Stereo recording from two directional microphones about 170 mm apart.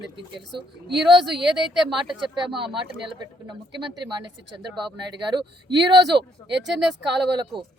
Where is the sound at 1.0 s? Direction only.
Centre (ahead or behind).